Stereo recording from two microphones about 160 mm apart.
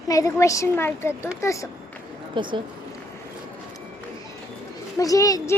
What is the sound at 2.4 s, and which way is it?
Speech, 30° right (ahead or behind).